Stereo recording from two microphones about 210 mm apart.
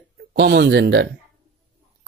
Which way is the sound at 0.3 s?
50° right (ahead or behind).